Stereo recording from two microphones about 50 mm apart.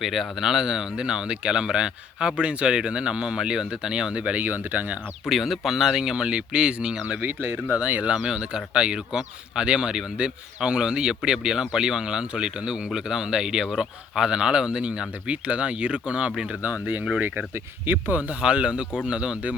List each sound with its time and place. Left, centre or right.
0.0 s speech: centre; by 4.4 s right
4.4 s speech: right
5.2 s speech: centre; by 7.2 s right
7.2 s speech: right
8.0 s speech: centre
16.8 s speech: right